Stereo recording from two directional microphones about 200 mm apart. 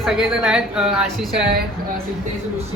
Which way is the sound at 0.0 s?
Centre (ahead or behind).